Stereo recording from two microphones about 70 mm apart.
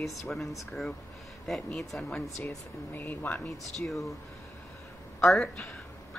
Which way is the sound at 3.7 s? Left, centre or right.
Centre.